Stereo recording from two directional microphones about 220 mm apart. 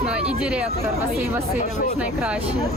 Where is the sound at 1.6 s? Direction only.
35° left (ahead or behind).